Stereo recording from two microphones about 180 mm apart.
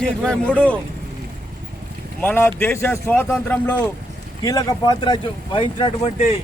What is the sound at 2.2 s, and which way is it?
Speech, 10° left (ahead or behind).